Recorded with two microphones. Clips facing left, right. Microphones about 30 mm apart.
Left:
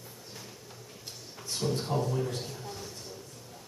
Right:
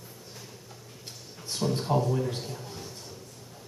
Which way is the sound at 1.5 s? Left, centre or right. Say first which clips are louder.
Right 4 dB; centre.